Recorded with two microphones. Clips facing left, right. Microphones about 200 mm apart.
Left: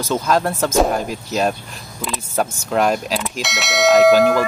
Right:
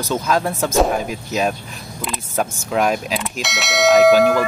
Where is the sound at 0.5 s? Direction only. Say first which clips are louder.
Even; centre (ahead or behind).